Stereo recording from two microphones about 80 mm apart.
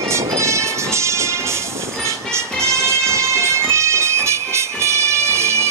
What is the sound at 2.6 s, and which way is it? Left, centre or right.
Music, right.